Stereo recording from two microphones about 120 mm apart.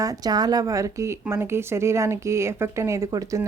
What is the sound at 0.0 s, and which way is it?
A woman's voice, 30° right (ahead or behind).